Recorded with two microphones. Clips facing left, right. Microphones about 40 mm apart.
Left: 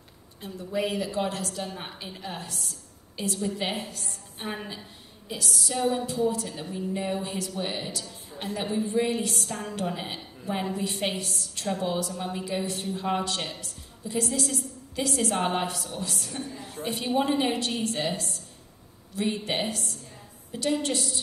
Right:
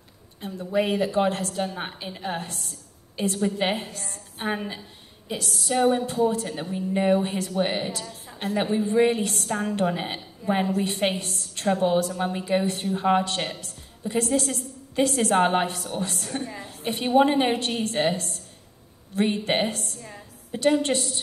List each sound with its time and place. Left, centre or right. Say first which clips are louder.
0.4 s a woman's voice: right 5 dB; right
1.8 s a woman's voice: right 5 dB; right
2.2 s a woman's voice: right 6 dB; right